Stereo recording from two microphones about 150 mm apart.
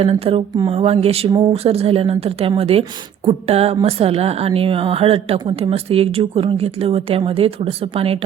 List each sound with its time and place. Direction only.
0.0 s a woman's voice: 40° right (ahead or behind)